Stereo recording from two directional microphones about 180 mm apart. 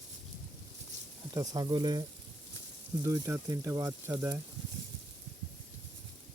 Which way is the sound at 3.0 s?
15° right (ahead or behind).